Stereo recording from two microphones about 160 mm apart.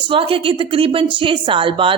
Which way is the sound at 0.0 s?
35° right (ahead or behind).